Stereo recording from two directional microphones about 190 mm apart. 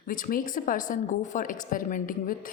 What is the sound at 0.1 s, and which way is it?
A woman's voice, 45° left (ahead or behind).